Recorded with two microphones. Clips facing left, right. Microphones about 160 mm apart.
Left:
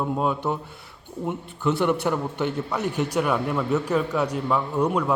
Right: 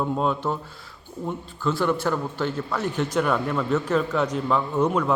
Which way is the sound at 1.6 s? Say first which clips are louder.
Left 1 dB; 20° left (ahead or behind).